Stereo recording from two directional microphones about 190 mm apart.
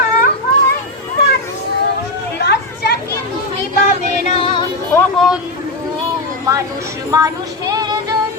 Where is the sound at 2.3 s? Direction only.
60° left (ahead or behind).